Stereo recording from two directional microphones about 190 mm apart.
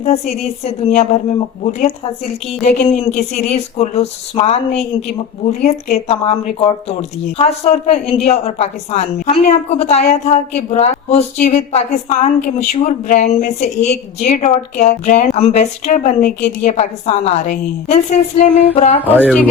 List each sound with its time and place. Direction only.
0.0 s a woman's voice: 35° left (ahead or behind)